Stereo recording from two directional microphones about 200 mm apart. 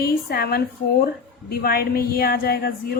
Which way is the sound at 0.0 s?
50° left (ahead or behind).